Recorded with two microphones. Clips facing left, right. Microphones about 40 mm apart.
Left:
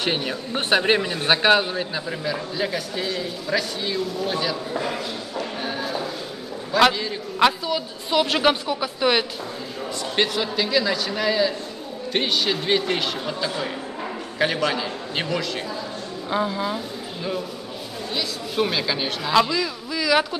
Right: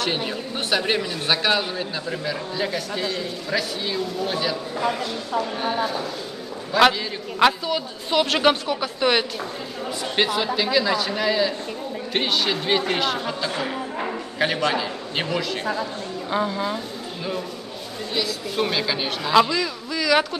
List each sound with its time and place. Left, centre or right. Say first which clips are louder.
0.3 s a man's voice: left 3 dB; left; by 4.9 s centre
5.6 s a sound: right 4 dB; centre
6.7 s a man's voice: right 1 dB; centre
13.5 s speech: right 1 dB; right
14.7 s a man's voice: right 1 dB; centre